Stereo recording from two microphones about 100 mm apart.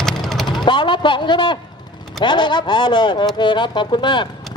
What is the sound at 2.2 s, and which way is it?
Speech, 50° left (ahead or behind).